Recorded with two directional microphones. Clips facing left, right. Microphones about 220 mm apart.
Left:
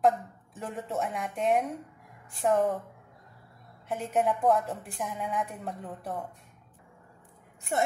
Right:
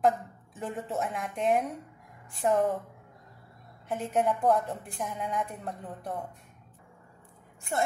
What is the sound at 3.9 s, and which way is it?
A woman's voice, centre (ahead or behind).